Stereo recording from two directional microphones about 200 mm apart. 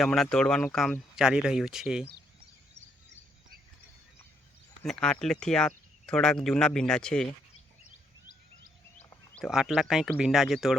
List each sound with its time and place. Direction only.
0.0 s speech: centre (ahead or behind)
4.8 s speech: 5° left (ahead or behind)
9.0 s speech: 5° left (ahead or behind)